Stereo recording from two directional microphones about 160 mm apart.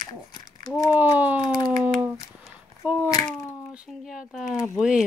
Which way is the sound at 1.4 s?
30° left (ahead or behind).